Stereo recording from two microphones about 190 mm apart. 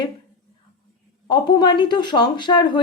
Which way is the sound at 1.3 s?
25° left (ahead or behind).